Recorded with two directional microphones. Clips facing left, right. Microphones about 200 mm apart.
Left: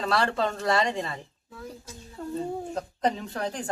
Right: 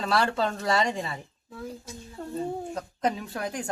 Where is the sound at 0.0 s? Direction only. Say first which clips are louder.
Even; centre (ahead or behind).